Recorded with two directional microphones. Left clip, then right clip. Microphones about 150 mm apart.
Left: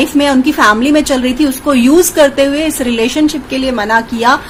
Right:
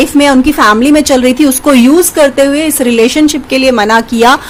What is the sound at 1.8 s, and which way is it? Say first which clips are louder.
A woman's voice: right 1 dB; 25° right (ahead or behind).